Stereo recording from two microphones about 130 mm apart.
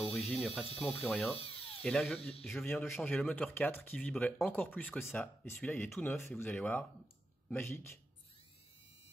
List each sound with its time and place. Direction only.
0.1 s speech: 5° left (ahead or behind)
1.4 s dental drill: 50° left (ahead or behind)
1.8 s speech: 5° left (ahead or behind)